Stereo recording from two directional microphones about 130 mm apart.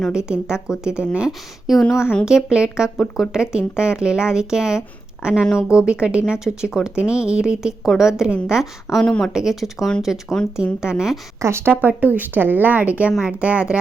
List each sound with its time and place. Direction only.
0.1 s speech: 5° right (ahead or behind)
1.9 s speech: 20° left (ahead or behind)
2.2 s speech: 5° right (ahead or behind)
5.4 s speech: 15° left (ahead or behind)
5.6 s speech: 5° right (ahead or behind)
11.4 s speech: 20° right (ahead or behind)